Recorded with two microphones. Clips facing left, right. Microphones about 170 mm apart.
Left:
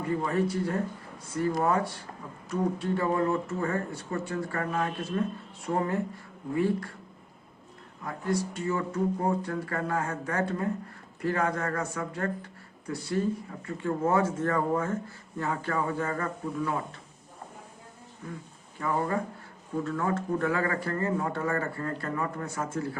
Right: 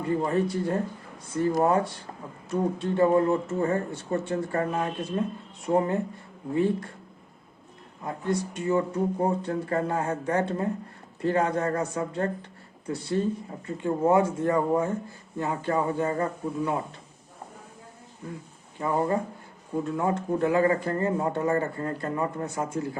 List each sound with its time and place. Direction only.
0.1 s speech: 30° right (ahead or behind)
8.0 s speech: 25° right (ahead or behind)
18.8 s speech: 25° right (ahead or behind)